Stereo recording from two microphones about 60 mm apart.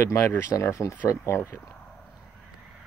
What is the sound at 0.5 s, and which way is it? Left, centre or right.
Speech, left.